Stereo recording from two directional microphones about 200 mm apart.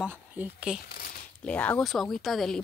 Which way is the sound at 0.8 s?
50° left (ahead or behind).